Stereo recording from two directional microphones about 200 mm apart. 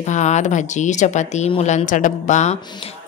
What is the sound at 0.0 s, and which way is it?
Speech, 35° left (ahead or behind).